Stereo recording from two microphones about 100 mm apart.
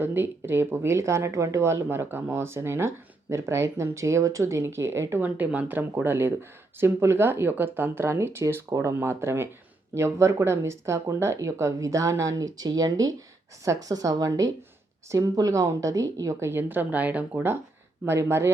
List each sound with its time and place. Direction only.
0.0 s speech: 20° right (ahead or behind)